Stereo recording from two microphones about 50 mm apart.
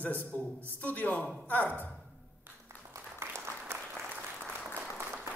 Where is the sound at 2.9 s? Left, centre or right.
Right.